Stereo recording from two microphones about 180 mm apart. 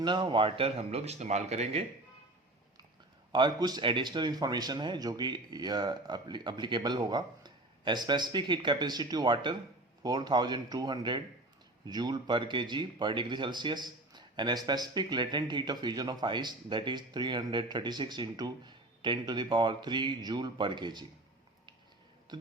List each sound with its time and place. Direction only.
0.0 s speech: 25° right (ahead or behind)
3.3 s a man's voice: 25° right (ahead or behind)
22.3 s a man's voice: 25° right (ahead or behind)